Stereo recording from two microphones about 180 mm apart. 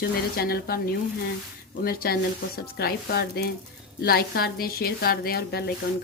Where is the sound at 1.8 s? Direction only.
55° left (ahead or behind).